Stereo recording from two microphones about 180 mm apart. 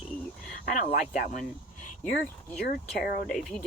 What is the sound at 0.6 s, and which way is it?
Speech, 50° left (ahead or behind).